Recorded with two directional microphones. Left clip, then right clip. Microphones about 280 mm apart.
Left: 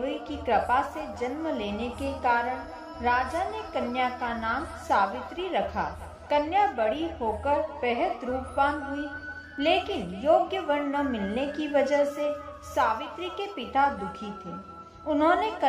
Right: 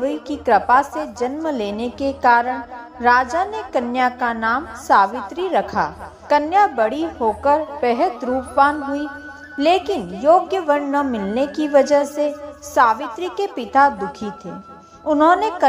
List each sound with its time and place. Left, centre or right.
0.0 s a woman's voice: right